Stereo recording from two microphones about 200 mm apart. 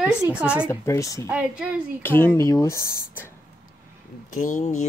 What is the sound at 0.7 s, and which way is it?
Speech, 15° left (ahead or behind).